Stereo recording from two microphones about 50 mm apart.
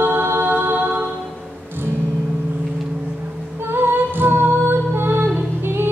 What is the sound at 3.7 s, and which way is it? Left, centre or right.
Music, right.